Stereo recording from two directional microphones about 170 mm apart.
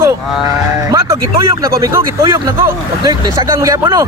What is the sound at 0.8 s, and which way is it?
Music, 15° right (ahead or behind).